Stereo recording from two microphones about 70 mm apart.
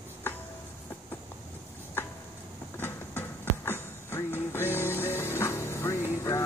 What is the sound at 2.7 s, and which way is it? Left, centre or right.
Music, left.